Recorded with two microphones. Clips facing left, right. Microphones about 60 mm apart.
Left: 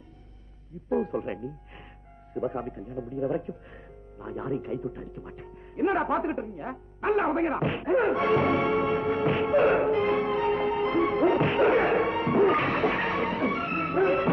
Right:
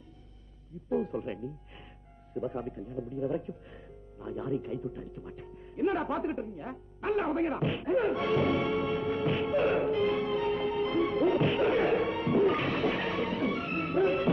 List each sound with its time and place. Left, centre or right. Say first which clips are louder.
0.8 s speech: left 4 dB; left